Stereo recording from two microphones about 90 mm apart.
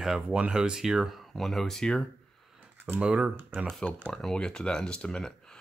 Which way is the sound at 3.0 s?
15° right (ahead or behind).